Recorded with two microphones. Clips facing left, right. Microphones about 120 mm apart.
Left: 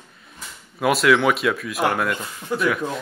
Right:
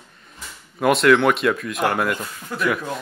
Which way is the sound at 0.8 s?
Centre (ahead or behind).